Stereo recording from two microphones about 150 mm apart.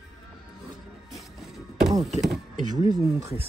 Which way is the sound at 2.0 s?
50° right (ahead or behind).